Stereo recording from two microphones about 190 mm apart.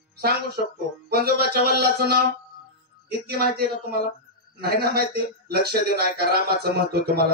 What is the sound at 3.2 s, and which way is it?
A man's voice, 55° right (ahead or behind).